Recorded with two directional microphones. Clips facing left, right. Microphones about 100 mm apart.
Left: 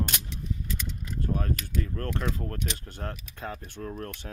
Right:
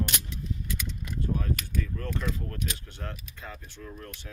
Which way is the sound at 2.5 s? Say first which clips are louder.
Left 2 dB; 40° left (ahead or behind).